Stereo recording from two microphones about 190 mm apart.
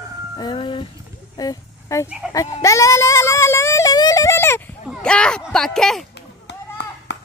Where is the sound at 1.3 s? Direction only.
20° left (ahead or behind).